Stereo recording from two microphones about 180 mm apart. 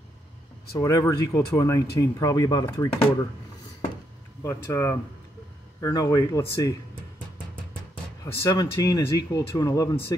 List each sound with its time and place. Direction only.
0.7 s speech: 20° left (ahead or behind)
4.4 s speech: 15° left (ahead or behind)
8.2 s speech: 20° left (ahead or behind)